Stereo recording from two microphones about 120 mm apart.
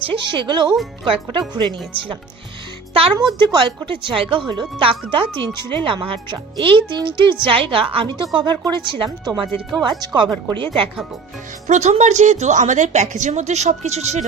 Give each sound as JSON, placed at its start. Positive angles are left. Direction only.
{"t": 0.0, "sound": "speech", "side_deg": -40}
{"t": 3.4, "sound": "speech", "side_deg": -40}
{"t": 11.7, "sound": "a woman's voice", "side_deg": -70}